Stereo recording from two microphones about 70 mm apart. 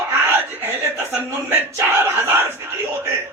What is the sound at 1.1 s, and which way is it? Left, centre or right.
A man's voice, right.